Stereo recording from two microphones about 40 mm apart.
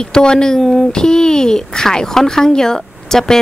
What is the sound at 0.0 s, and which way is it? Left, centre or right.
Speech, left.